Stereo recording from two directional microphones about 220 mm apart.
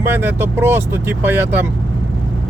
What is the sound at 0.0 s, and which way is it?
Speech, 10° right (ahead or behind).